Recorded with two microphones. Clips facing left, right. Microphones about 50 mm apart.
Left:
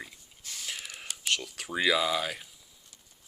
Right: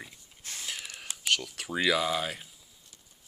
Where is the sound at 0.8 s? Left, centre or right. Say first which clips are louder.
Even; centre.